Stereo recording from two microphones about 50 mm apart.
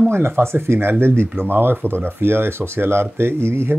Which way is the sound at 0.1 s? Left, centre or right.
Right.